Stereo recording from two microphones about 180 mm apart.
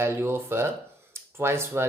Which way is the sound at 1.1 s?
15° right (ahead or behind).